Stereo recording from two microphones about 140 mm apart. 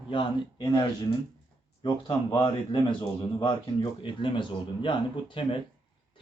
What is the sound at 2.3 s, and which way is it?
A man's voice, 35° left (ahead or behind).